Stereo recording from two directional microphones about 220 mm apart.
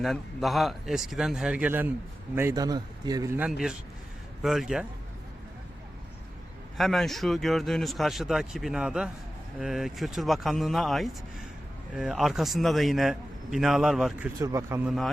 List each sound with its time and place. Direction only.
0.0 s a man's voice: centre (ahead or behind); by 3.4 s 15° right (ahead or behind)
3.4 s a man's voice: 5° right (ahead or behind)
6.7 s a man's voice: centre (ahead or behind)